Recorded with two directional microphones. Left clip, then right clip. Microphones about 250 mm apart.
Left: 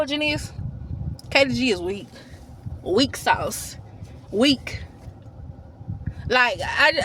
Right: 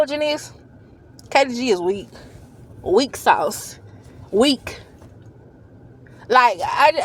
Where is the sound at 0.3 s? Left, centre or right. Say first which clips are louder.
Right 2 dB; centre.